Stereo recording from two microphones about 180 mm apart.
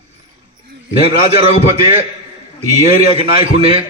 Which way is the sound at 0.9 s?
30° right (ahead or behind).